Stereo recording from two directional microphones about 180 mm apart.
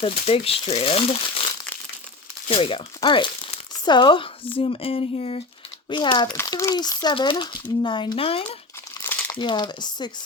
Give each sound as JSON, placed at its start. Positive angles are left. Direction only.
{"t": 0.0, "sound": "speech", "side_deg": 30}
{"t": 2.5, "sound": "speech", "side_deg": 30}
{"t": 9.0, "sound": "crumpling", "side_deg": 15}
{"t": 9.4, "sound": "speech", "side_deg": 25}